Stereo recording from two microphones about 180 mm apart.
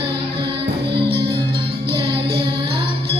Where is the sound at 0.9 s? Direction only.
65° right (ahead or behind).